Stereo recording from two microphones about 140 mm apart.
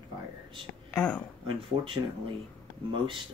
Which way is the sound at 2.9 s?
40° right (ahead or behind).